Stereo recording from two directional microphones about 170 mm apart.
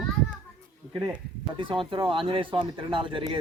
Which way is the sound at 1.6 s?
30° right (ahead or behind).